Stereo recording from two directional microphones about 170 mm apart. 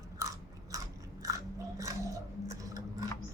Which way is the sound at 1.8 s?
20° right (ahead or behind).